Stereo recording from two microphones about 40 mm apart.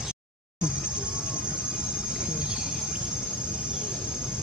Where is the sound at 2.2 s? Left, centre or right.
Right.